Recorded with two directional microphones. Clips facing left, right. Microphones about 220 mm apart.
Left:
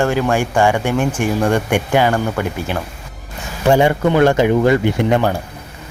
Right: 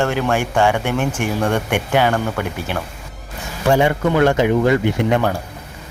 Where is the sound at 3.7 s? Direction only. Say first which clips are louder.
Left 2 dB; 30° left (ahead or behind).